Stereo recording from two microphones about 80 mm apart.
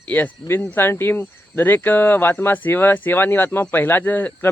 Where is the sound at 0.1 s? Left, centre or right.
Left.